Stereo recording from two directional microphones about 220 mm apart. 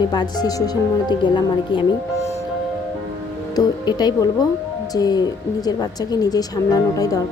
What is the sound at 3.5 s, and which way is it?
Speech, 20° left (ahead or behind).